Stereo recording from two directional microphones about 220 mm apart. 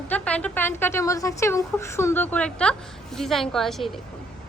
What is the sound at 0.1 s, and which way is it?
A woman's voice, 5° left (ahead or behind).